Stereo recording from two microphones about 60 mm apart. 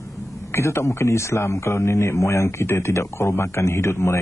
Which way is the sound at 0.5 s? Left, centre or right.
Left.